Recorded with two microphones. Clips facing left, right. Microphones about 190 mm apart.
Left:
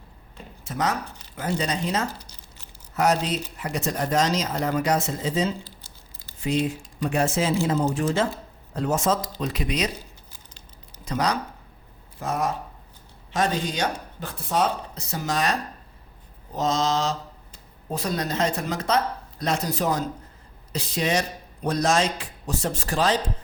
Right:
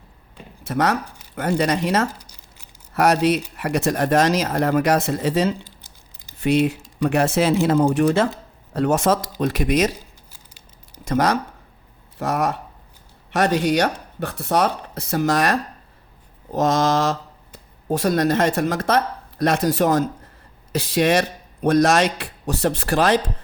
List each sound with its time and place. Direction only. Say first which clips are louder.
0.7 s speech: right 6 dB; 65° right (ahead or behind)
2.1 s crumpling: left 1 dB; 10° right (ahead or behind)
2.9 s speech: right 5 dB; 65° right (ahead or behind)
5.6 s crumpling: left 1 dB; 15° right (ahead or behind)
6.4 s speech: right 6 dB; 65° right (ahead or behind)
9.4 s speech: right 7 dB; 50° right (ahead or behind)
11.1 s speech: right 6 dB; 55° right (ahead or behind)
16.6 s speech: right 5 dB; 55° right (ahead or behind); by 18.1 s 80° right
18.1 s speech: right 8 dB; 65° right (ahead or behind)
18.6 s speech: right 4 dB; 50° right (ahead or behind); by 23.2 s 70° right (ahead or behind)